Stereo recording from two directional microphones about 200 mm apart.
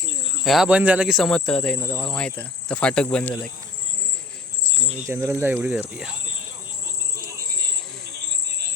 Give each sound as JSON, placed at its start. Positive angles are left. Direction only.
{"t": 0.4, "sound": "speech", "side_deg": 0}
{"t": 5.0, "sound": "speech", "side_deg": -15}